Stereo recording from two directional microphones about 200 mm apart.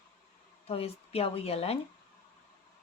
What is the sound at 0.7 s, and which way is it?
Speech, 30° left (ahead or behind).